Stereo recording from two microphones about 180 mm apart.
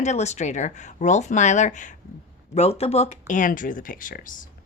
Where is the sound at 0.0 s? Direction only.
40° left (ahead or behind).